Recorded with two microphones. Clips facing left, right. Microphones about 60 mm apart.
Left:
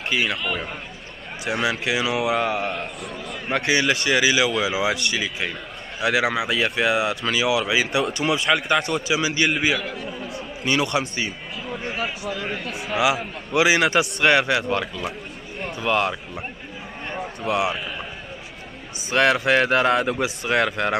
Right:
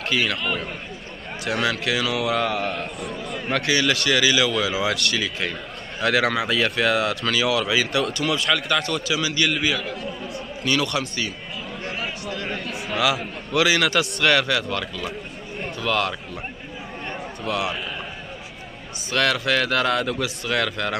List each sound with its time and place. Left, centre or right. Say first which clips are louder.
0.1 s a man's voice: even; centre
0.4 s a man's voice: even; centre
1.7 s a man's voice: left 1 dB; left
2.5 s a man's voice: even; centre
3.6 s a man's voice: left 1 dB; left
9.8 s a man's voice: even; centre
10.6 s a man's voice: left 1 dB; left
11.8 s a sound: left 2 dB; centre
12.9 s a man's voice: left 2 dB; centre
17.4 s speech: left 3 dB; centre
19.0 s a man's voice: left 3 dB; left